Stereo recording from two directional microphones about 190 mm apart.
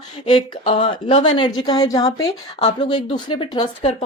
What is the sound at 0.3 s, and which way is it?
A woman's voice, 25° left (ahead or behind).